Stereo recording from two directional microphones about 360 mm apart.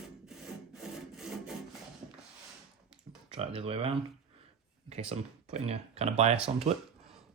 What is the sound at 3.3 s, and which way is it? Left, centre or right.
Speech, centre.